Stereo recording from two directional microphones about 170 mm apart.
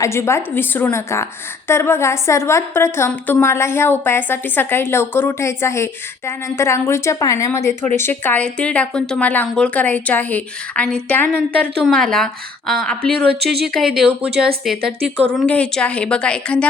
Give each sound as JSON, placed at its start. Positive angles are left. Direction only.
{"t": 0.0, "sound": "a woman's voice", "side_deg": 15}
{"t": 13.1, "sound": "a woman's voice", "side_deg": -65}
{"t": 13.7, "sound": "a woman's voice", "side_deg": 0}